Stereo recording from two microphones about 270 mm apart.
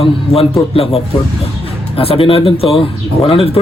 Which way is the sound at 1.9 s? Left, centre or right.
Left.